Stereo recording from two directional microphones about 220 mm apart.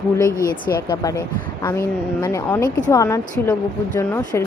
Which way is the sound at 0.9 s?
15° left (ahead or behind).